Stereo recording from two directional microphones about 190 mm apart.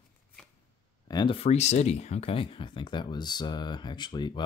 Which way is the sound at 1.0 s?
25° left (ahead or behind).